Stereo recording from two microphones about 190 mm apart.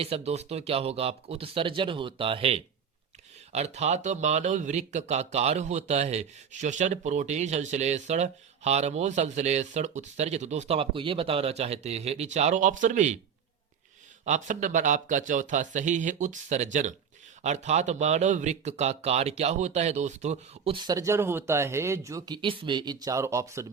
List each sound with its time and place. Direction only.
0.0 s speech: 30° right (ahead or behind)
14.3 s speech: 40° right (ahead or behind); by 23.6 s 15° right (ahead or behind)